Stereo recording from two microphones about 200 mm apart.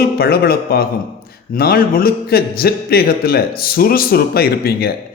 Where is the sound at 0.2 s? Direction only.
50° left (ahead or behind).